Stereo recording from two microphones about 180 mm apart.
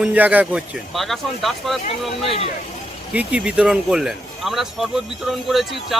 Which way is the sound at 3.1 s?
5° right (ahead or behind).